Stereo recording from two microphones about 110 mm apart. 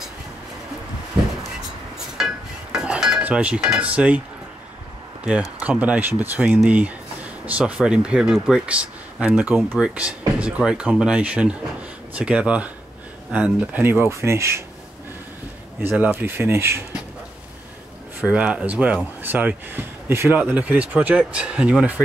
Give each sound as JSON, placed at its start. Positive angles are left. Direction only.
{"t": 2.1, "sound": "cutlery", "side_deg": -5}
{"t": 5.6, "sound": "speech", "side_deg": -10}
{"t": 14.0, "sound": "speech", "side_deg": -25}
{"t": 15.8, "sound": "speech", "side_deg": -15}
{"t": 18.2, "sound": "speech", "side_deg": -10}